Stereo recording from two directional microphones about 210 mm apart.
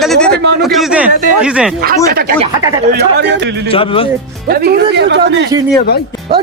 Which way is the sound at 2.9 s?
55° right (ahead or behind).